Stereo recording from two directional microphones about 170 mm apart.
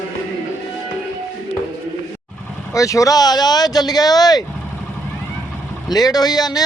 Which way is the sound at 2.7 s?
20° left (ahead or behind).